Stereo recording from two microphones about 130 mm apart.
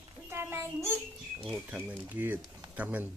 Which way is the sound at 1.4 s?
10° right (ahead or behind).